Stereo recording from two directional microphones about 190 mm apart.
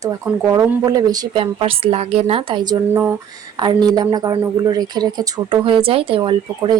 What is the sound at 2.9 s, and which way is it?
Speech, 10° right (ahead or behind).